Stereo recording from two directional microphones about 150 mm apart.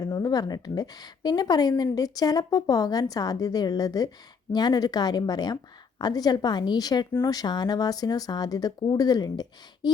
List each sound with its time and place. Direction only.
0.0 s speech: 25° left (ahead or behind)